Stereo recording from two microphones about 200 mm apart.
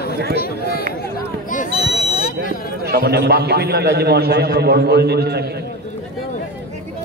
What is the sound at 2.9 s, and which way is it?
A man's voice, 55° right (ahead or behind).